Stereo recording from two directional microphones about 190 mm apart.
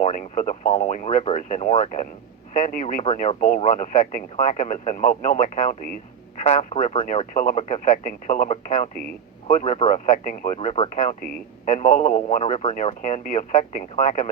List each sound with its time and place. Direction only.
0.0 s speech: 40° left (ahead or behind)